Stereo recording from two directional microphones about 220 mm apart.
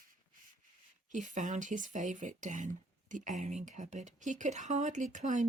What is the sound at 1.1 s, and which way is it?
Speech, 35° right (ahead or behind).